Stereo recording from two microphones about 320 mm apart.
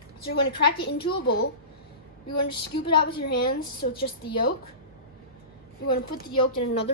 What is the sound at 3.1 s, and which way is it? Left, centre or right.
Speech, left.